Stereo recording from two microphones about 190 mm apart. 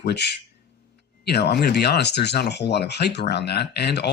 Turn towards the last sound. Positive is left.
turn(degrees=60)  # may be behind; listen again after turning